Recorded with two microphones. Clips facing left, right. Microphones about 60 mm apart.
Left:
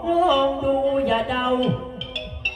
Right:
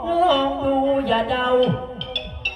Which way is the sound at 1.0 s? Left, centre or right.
Centre.